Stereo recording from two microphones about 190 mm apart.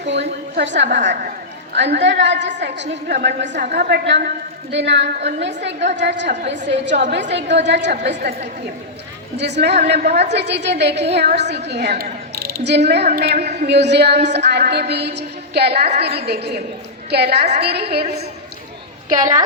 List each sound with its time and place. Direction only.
0.0 s a sound: 65° right (ahead or behind)
0.9 s a woman's voice: 65° right (ahead or behind)
9.4 s a woman's voice: 65° right (ahead or behind)
18.0 s a woman's voice: 35° right (ahead or behind)
19.0 s a woman's voice: 45° right (ahead or behind)